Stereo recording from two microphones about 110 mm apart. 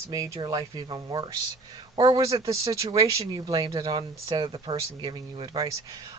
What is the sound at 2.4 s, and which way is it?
Speech, 30° right (ahead or behind).